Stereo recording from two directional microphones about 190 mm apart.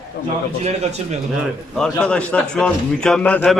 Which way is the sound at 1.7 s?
5° left (ahead or behind).